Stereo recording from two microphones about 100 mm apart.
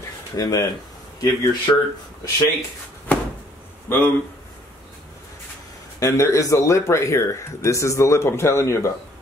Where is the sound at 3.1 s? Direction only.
15° left (ahead or behind).